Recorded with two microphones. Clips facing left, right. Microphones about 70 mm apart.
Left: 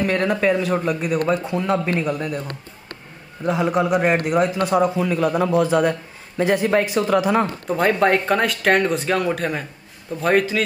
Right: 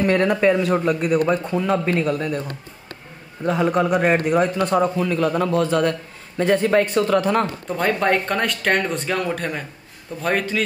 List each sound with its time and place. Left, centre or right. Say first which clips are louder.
0.0 s a man's voice: right 2 dB; centre
3.4 s a man's voice: even; centre